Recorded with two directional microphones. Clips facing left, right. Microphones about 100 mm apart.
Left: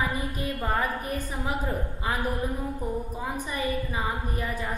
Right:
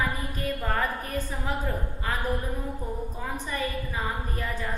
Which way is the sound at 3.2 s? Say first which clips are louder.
Right 1 dB; 15° left (ahead or behind).